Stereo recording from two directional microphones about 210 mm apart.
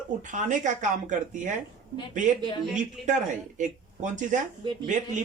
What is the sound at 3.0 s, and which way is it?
Speech, 35° right (ahead or behind).